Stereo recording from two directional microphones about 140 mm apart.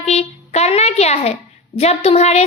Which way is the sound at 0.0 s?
50° left (ahead or behind).